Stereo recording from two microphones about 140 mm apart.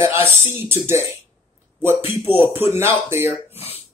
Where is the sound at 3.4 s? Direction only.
45° left (ahead or behind).